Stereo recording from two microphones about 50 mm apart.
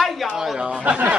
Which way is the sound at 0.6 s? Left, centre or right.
Right.